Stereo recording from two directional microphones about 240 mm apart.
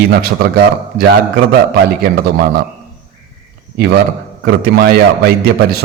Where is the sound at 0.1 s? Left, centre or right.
Right.